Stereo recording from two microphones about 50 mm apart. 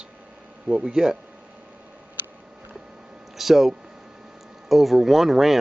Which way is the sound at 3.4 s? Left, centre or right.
Centre.